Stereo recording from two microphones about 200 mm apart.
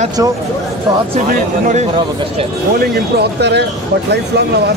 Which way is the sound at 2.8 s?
55° right (ahead or behind).